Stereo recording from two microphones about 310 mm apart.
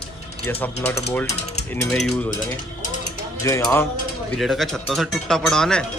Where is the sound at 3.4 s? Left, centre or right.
Centre.